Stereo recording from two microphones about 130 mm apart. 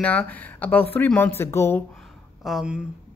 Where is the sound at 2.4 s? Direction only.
5° right (ahead or behind).